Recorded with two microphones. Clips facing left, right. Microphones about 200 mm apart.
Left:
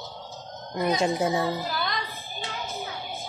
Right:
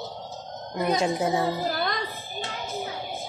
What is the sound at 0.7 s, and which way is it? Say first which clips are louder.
Speech: even; centre (ahead or behind).